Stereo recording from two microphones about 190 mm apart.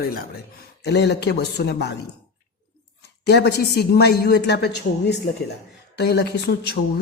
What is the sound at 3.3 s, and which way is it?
A woman's voice, 60° left (ahead or behind).